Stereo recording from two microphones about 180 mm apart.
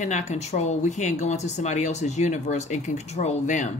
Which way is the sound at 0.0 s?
40° left (ahead or behind).